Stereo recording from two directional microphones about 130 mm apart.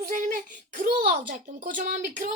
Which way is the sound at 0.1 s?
90° right.